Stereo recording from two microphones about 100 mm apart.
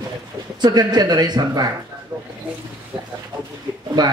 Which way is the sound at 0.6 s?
45° right (ahead or behind).